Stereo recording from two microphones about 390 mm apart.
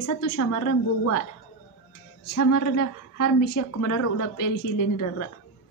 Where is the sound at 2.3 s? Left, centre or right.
Left.